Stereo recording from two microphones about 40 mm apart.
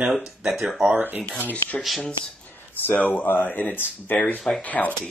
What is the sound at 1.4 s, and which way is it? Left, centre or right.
Speech, left.